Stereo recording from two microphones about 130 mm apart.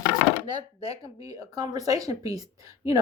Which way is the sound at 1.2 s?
25° right (ahead or behind).